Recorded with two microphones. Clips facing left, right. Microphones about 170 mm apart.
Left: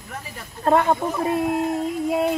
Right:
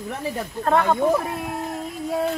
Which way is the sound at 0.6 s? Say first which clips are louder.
Even; 20° left (ahead or behind).